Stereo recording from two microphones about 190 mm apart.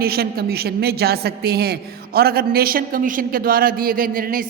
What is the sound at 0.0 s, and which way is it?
A woman's voice, 55° right (ahead or behind).